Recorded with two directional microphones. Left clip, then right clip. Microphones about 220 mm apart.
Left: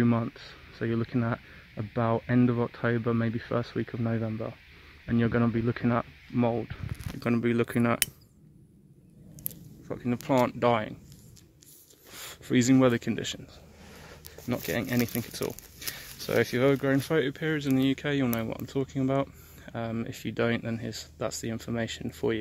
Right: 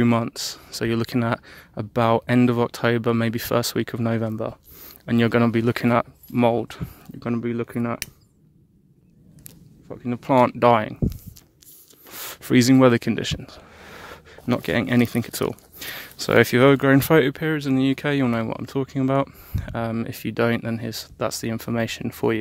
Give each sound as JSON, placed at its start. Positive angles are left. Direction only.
{"t": 0.0, "sound": "speech", "side_deg": -50}
{"t": 7.2, "sound": "speech", "side_deg": -15}
{"t": 10.0, "sound": "speech", "side_deg": -25}
{"t": 10.3, "sound": "speech", "side_deg": -40}